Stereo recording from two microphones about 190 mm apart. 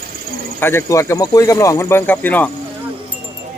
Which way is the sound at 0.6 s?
10° left (ahead or behind).